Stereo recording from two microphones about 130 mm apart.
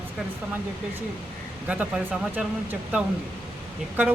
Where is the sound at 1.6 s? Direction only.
10° right (ahead or behind).